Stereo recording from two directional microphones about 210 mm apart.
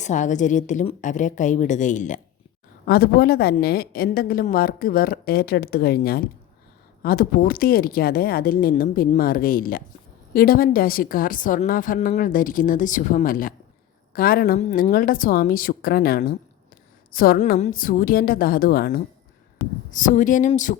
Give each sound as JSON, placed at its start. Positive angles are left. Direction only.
{"t": 0.0, "sound": "a woman's voice", "side_deg": 35}
{"t": 2.8, "sound": "a woman's voice", "side_deg": 45}
{"t": 14.6, "sound": "a woman's voice", "side_deg": 35}